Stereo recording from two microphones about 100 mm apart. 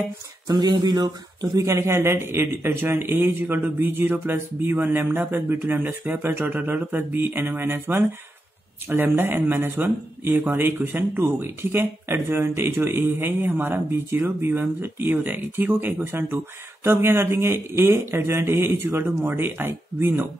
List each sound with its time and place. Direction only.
0.5 s speech: 45° right (ahead or behind); by 20.2 s 20° right (ahead or behind)